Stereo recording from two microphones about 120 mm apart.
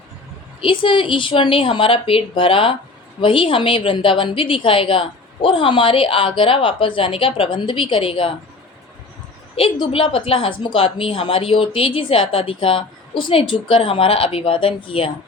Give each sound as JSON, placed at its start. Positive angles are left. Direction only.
{"t": 0.6, "sound": "a woman's voice", "side_deg": 45}
{"t": 9.6, "sound": "a woman's voice", "side_deg": 45}